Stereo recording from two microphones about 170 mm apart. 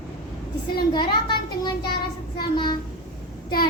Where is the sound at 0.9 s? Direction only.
25° left (ahead or behind).